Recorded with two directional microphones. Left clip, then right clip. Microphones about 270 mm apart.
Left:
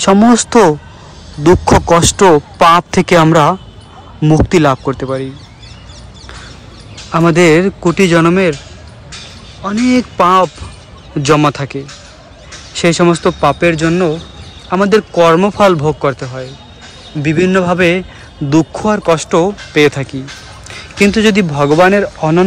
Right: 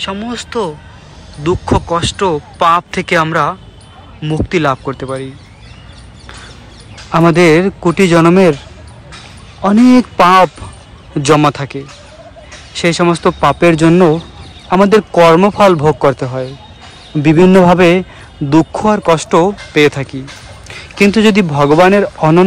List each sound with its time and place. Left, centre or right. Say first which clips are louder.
0.0 s speech: left 12 dB; left
2.0 s speech: left 6 dB; centre
7.1 s speech: right 1 dB; centre
9.6 s speech: right 5 dB; centre
12.8 s speech: left 1 dB; centre